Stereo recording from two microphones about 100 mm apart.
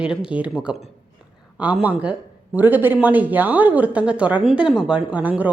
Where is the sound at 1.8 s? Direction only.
15° right (ahead or behind).